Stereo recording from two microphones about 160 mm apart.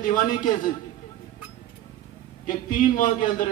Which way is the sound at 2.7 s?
55° left (ahead or behind).